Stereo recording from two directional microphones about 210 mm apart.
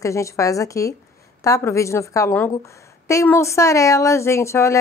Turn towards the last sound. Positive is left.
turn(degrees=15)  # may be behind; listen again after turning